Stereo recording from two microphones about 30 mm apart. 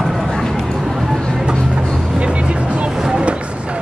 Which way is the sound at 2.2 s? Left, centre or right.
Right.